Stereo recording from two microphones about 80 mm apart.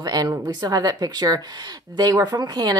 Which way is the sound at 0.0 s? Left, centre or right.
Right.